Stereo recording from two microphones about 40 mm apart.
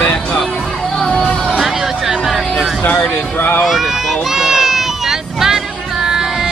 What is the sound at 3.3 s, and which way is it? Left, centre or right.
Speech, left.